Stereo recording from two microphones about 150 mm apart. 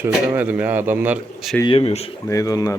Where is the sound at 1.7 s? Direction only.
40° left (ahead or behind).